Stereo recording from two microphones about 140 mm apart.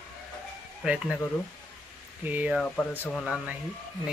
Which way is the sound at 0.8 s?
5° right (ahead or behind).